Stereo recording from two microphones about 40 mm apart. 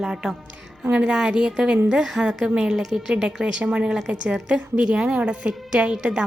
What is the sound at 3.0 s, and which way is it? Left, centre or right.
A woman's voice, centre.